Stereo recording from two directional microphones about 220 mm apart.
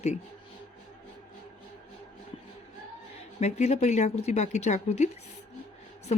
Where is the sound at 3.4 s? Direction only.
30° left (ahead or behind).